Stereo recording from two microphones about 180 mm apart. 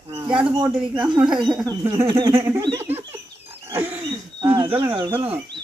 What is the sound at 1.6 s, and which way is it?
A man's voice, 20° right (ahead or behind).